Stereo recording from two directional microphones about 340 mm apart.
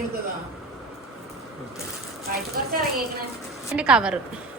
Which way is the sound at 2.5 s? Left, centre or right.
Right.